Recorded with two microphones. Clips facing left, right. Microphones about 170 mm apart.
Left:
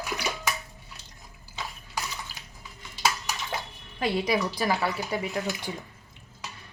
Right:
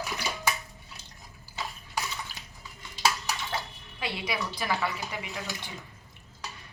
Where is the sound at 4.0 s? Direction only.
40° left (ahead or behind).